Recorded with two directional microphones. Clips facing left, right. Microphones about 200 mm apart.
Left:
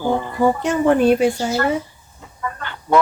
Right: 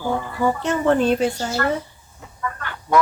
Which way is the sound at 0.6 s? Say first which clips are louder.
Left 2 dB; 15° left (ahead or behind).